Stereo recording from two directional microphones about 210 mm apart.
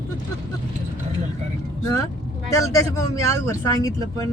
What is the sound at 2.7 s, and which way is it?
Speech, 15° left (ahead or behind).